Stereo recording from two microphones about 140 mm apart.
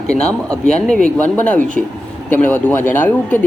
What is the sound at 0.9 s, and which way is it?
Speech, 10° left (ahead or behind).